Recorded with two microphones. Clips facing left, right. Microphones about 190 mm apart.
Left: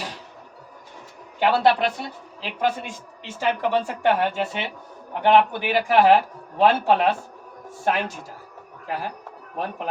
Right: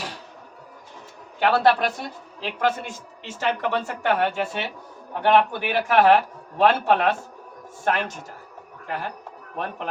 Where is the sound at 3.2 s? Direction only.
10° left (ahead or behind).